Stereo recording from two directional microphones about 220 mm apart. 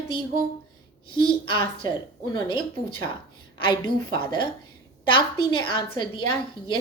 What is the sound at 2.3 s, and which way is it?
A woman's voice, 20° left (ahead or behind).